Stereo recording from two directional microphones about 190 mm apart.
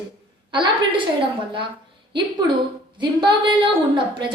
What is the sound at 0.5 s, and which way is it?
Speech, 25° right (ahead or behind).